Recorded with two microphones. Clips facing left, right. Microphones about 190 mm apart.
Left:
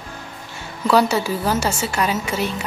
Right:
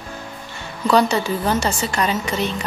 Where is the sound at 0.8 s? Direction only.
5° left (ahead or behind).